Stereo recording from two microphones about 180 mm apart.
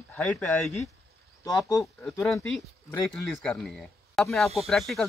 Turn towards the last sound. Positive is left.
turn(degrees=0)  # may be behind; listen again after turning